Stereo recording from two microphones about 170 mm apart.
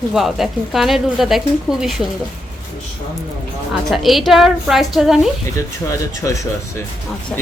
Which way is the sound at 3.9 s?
Centre (ahead or behind).